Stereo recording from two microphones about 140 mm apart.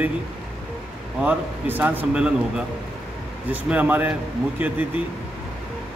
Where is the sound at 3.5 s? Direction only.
10° right (ahead or behind).